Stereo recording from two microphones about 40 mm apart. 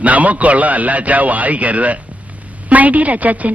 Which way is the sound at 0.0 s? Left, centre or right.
Right.